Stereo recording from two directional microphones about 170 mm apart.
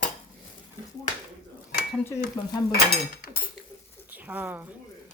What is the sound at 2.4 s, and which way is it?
Stir, 20° left (ahead or behind).